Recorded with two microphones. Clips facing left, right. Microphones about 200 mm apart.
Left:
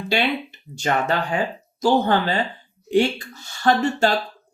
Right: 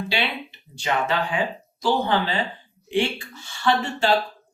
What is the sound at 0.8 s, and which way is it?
Speech, 45° left (ahead or behind).